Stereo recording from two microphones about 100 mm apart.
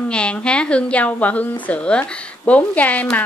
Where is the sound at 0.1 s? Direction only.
10° left (ahead or behind).